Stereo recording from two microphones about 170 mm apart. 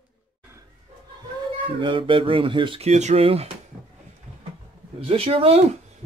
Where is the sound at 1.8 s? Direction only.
30° right (ahead or behind).